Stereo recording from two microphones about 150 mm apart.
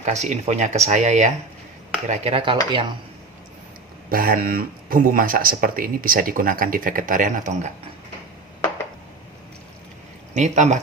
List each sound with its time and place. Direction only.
0.0 s speech: 50° right (ahead or behind)
2.0 s dishes: 40° right (ahead or behind)
4.1 s speech: 75° right (ahead or behind); by 7.7 s 55° right (ahead or behind)
10.3 s speech: 55° right (ahead or behind)